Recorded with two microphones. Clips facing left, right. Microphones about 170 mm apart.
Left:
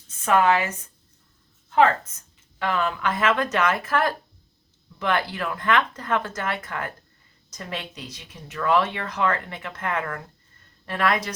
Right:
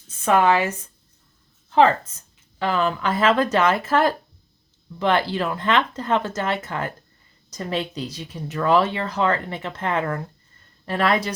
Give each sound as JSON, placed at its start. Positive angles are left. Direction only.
{"t": 0.3, "sound": "speech", "side_deg": -30}
{"t": 1.7, "sound": "speech", "side_deg": -30}